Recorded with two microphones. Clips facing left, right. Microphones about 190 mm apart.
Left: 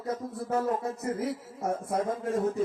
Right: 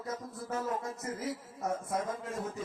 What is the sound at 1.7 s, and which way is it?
Speech, 60° left (ahead or behind).